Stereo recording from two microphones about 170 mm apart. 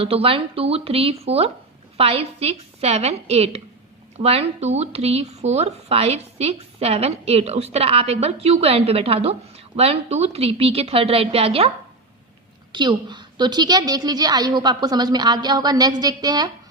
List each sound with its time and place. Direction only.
0.0 s speech: 35° right (ahead or behind)
12.7 s a woman's voice: 25° right (ahead or behind)